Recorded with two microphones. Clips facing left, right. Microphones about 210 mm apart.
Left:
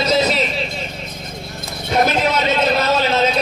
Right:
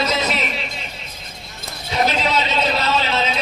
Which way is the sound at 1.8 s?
50° left (ahead or behind).